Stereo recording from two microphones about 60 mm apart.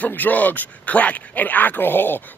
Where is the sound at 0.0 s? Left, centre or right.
Left.